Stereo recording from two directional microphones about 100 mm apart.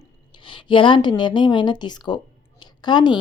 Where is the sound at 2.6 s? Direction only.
50° left (ahead or behind).